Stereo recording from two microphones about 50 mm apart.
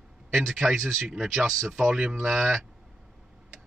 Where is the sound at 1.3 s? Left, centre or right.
Centre.